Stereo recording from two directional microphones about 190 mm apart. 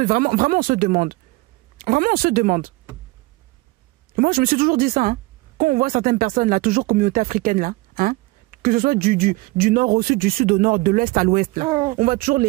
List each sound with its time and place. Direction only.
0.0 s speech: 45° right (ahead or behind)
4.1 s speech: 50° right (ahead or behind)